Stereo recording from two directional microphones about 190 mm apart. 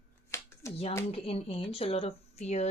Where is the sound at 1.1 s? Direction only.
30° left (ahead or behind).